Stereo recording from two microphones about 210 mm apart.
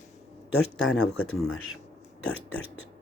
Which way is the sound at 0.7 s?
5° left (ahead or behind).